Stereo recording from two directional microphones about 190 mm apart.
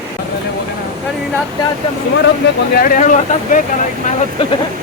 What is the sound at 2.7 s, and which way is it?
Speech, 45° left (ahead or behind).